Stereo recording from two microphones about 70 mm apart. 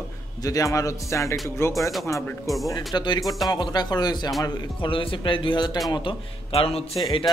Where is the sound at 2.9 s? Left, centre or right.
Left.